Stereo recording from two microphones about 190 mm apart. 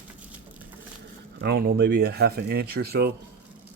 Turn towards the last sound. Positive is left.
turn(degrees=-60)  # may be behind; listen again after turning